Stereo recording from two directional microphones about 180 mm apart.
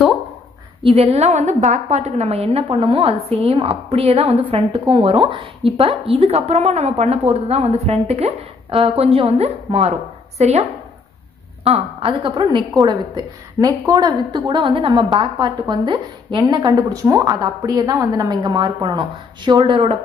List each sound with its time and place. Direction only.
0.8 s a woman's voice: 35° right (ahead or behind)
11.6 s a woman's voice: 35° right (ahead or behind)